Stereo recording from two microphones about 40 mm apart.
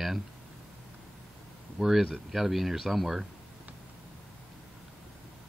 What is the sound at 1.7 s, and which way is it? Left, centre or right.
Speech, centre.